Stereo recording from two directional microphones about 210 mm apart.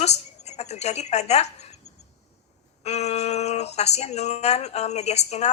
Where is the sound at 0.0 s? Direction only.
30° left (ahead or behind).